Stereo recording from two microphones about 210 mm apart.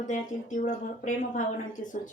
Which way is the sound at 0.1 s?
35° left (ahead or behind).